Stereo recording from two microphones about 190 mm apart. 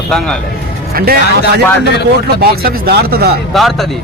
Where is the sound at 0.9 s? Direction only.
55° right (ahead or behind).